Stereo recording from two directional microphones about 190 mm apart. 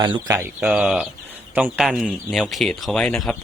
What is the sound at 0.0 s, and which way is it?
A man's voice, 20° right (ahead or behind).